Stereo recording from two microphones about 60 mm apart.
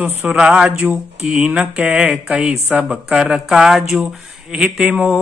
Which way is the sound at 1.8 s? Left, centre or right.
Centre.